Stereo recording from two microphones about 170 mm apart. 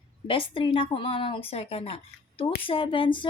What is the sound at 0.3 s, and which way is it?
A woman's voice, 30° left (ahead or behind).